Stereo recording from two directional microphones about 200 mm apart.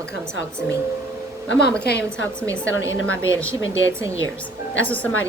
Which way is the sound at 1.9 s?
55° left (ahead or behind).